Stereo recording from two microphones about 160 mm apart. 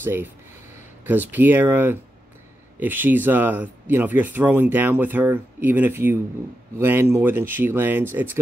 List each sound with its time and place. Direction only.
0.0 s speech: 15° right (ahead or behind)